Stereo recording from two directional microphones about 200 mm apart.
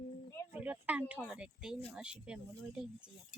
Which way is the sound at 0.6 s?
5° right (ahead or behind).